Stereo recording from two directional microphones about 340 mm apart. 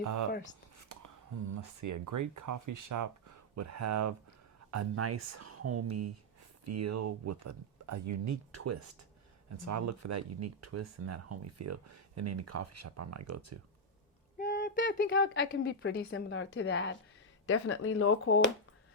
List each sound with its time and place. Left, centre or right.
0.0 s speech: right
1.8 s speech: right
14.3 s speech: left